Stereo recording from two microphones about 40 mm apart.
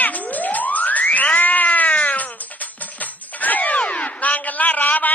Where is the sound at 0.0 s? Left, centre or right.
Left.